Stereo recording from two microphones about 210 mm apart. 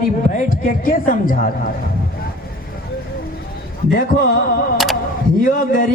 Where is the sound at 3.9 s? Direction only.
45° left (ahead or behind).